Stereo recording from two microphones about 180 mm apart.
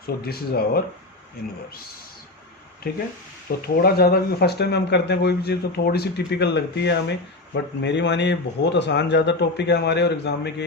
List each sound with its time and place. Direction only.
0.0 s speech: 60° left (ahead or behind)
2.8 s a man's voice: 60° left (ahead or behind)